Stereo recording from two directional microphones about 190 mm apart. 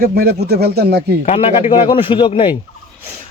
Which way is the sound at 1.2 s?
35° left (ahead or behind).